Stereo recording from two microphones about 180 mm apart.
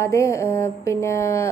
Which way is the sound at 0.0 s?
15° left (ahead or behind).